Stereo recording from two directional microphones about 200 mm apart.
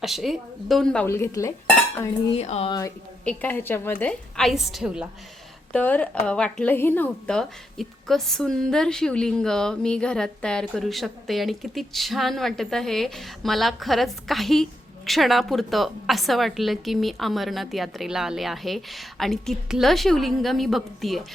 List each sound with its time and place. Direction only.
0.0 s a woman's voice: centre (ahead or behind); by 1.5 s 15° left (ahead or behind)
2.0 s dishes: 30° left (ahead or behind)
3.2 s a woman's voice: 10° left (ahead or behind)
5.7 s a woman's voice: 5° left (ahead or behind)